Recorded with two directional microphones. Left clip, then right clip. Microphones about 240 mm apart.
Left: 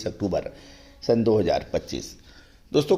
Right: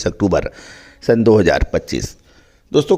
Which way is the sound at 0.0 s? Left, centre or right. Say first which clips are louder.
Right 10 dB; right.